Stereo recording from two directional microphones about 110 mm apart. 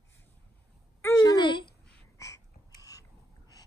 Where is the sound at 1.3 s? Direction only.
45° left (ahead or behind).